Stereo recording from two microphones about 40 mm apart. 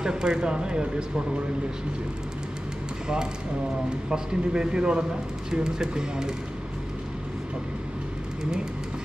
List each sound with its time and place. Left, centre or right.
0.0 s speech: centre
4.1 s speech: right